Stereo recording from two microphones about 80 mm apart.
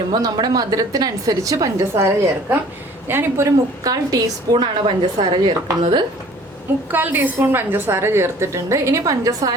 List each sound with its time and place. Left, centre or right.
0.1 s a woman's voice: right
3.8 s a woman's voice: right
4.6 s a woman's voice: right
6.9 s a woman's voice: right